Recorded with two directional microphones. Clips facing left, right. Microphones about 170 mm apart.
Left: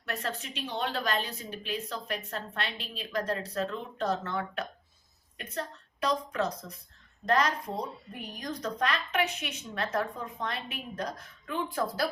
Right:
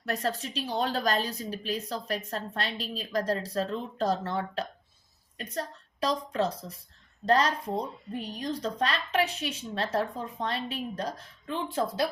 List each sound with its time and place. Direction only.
0.0 s a woman's voice: 40° right (ahead or behind)